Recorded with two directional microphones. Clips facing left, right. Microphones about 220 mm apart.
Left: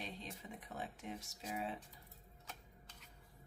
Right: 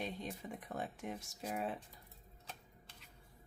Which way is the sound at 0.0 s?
50° right (ahead or behind).